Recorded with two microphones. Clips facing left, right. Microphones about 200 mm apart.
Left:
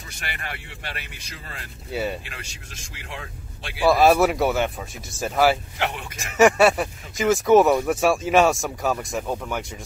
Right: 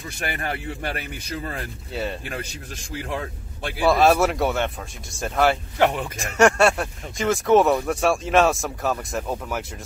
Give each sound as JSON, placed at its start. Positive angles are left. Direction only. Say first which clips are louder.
{"t": 0.2, "sound": "a man's voice", "louder": "right 7 dB", "side_deg": -45}
{"t": 1.9, "sound": "speech", "louder": "left 2 dB", "side_deg": 5}
{"t": 3.1, "sound": "speech", "louder": "right 5 dB", "side_deg": -50}
{"t": 3.8, "sound": "speech", "louder": "left 1 dB", "side_deg": 0}
{"t": 5.8, "sound": "a man's voice", "louder": "right 8 dB", "side_deg": -50}
{"t": 6.1, "sound": "speech", "louder": "left 4 dB", "side_deg": 0}